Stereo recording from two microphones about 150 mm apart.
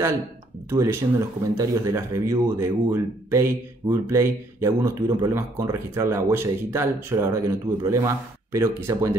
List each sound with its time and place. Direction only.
0.7 s speech: 20° right (ahead or behind)